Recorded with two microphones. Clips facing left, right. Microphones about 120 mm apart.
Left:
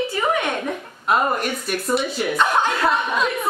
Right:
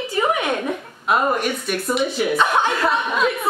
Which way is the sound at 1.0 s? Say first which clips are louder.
Right 1 dB; centre (ahead or behind).